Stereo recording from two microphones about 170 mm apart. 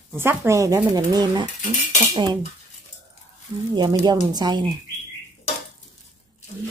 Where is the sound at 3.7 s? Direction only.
25° right (ahead or behind).